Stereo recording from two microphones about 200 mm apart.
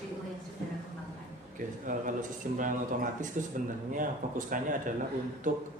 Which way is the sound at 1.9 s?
40° right (ahead or behind).